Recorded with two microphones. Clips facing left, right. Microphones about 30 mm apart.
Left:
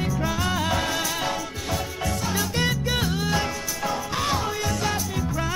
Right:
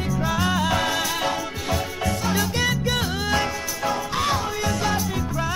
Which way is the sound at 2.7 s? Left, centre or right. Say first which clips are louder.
Right 1 dB; right.